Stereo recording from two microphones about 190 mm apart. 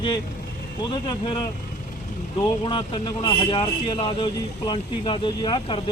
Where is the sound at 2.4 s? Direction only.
25° left (ahead or behind).